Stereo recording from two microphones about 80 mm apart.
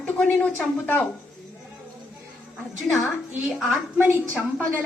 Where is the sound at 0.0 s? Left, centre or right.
Centre.